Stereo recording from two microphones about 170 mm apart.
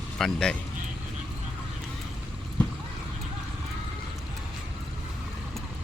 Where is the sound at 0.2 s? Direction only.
5° left (ahead or behind).